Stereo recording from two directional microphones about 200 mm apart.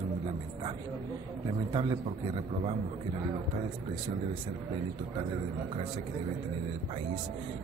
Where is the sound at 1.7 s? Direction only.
25° right (ahead or behind).